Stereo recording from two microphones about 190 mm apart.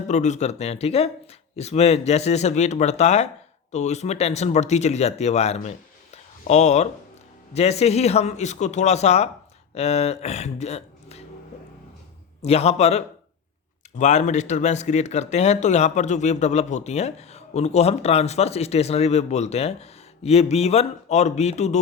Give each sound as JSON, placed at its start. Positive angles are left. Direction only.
{"t": 0.1, "sound": "speech", "side_deg": 40}
{"t": 12.4, "sound": "speech", "side_deg": 35}